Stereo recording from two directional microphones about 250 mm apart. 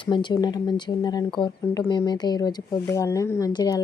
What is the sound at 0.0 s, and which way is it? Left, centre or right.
Speech, centre.